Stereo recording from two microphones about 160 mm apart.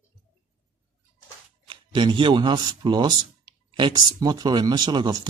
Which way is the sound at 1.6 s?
30° right (ahead or behind).